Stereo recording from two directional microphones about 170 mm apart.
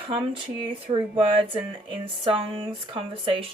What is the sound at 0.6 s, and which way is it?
A woman's voice, 30° right (ahead or behind).